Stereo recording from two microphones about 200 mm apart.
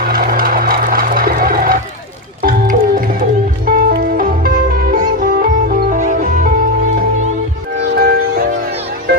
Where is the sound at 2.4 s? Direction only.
45° right (ahead or behind).